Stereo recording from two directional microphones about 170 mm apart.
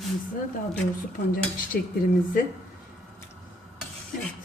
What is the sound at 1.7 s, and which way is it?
Speech, 65° left (ahead or behind).